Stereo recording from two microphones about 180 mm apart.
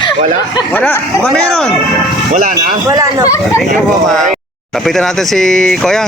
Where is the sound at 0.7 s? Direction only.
10° left (ahead or behind).